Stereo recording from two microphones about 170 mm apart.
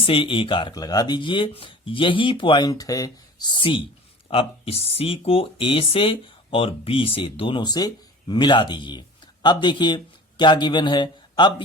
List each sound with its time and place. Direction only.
0.0 s speech: 30° left (ahead or behind)